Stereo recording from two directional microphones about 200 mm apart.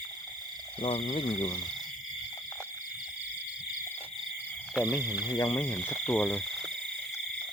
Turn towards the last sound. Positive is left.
turn(degrees=5)  # may be behind; listen again after turning